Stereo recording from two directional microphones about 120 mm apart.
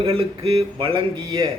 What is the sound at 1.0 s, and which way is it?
Speech, 35° right (ahead or behind).